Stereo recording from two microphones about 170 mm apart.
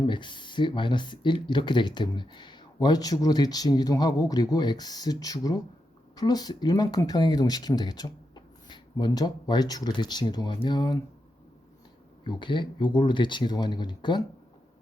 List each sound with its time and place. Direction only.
0.1 s speech: 30° left (ahead or behind)
12.2 s speech: 30° left (ahead or behind)